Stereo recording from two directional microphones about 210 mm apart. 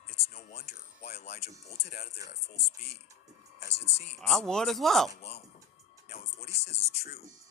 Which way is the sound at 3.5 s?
30° left (ahead or behind).